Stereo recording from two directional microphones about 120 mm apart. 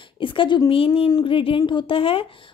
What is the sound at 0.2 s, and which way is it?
Speech, 45° left (ahead or behind).